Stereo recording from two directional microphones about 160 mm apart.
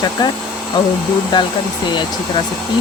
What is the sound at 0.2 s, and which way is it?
Speech, 25° left (ahead or behind).